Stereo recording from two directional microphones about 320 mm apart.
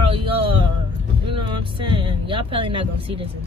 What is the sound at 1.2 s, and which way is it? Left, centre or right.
Vehicle, centre.